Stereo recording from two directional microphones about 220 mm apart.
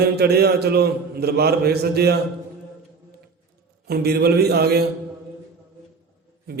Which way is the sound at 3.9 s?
45° right (ahead or behind).